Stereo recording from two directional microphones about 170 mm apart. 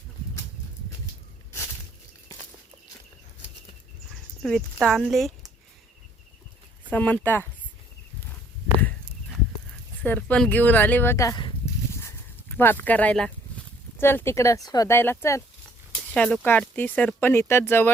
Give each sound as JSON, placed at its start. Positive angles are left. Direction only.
{"t": 4.4, "sound": "speech", "side_deg": 0}
{"t": 6.9, "sound": "speech", "side_deg": 10}
{"t": 10.0, "sound": "speech", "side_deg": 10}
{"t": 11.9, "sound": "a sound", "side_deg": 15}
{"t": 14.0, "sound": "speech", "side_deg": 15}